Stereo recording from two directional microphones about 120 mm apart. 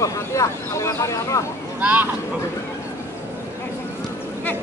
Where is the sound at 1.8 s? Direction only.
10° right (ahead or behind).